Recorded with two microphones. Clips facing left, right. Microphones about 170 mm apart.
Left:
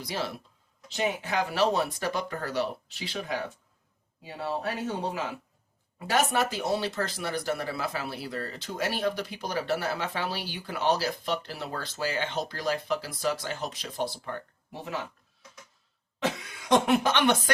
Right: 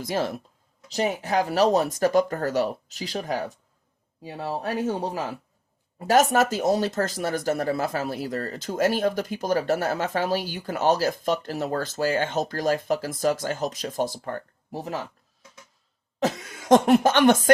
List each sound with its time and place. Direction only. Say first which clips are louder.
0.0 s speech: right 7 dB; 45° right (ahead or behind)
16.2 s speech: right 5 dB; 45° right (ahead or behind)